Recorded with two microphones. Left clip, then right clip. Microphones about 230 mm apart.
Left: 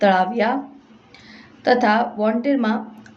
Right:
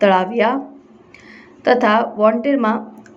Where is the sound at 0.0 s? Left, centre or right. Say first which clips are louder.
Right 3 dB; centre.